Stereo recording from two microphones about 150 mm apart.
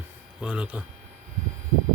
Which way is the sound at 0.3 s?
5° right (ahead or behind).